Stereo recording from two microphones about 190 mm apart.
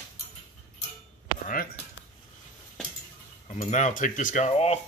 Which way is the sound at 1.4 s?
45° left (ahead or behind).